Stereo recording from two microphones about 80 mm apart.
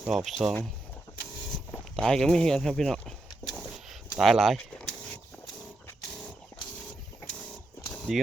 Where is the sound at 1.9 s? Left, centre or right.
Centre.